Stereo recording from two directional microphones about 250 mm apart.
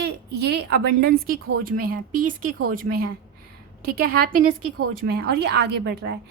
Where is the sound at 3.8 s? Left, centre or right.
Right.